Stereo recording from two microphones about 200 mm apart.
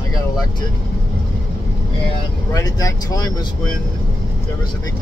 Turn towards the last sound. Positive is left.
turn(degrees=20)  # may be behind; listen again after turning